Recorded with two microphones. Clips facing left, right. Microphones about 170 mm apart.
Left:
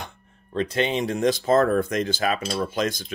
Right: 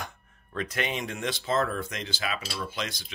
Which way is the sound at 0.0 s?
30° left (ahead or behind).